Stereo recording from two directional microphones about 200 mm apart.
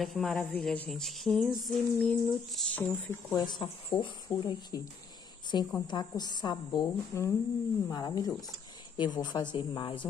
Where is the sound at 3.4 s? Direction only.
20° left (ahead or behind).